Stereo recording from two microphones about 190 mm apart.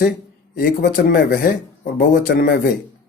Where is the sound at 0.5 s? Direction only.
50° left (ahead or behind).